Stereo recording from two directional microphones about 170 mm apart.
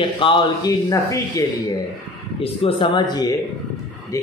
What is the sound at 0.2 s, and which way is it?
A man's voice, 30° left (ahead or behind).